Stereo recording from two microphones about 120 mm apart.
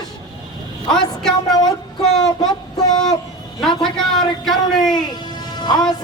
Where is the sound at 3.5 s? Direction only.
5° left (ahead or behind).